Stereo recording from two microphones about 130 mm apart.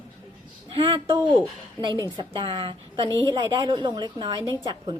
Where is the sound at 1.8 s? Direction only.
35° right (ahead or behind).